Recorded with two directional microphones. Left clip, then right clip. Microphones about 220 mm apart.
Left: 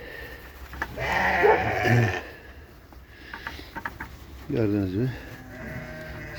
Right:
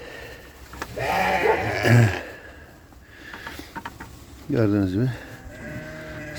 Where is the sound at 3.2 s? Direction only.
25° right (ahead or behind).